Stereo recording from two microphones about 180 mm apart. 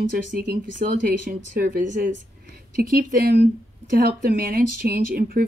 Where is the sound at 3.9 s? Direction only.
60° right (ahead or behind).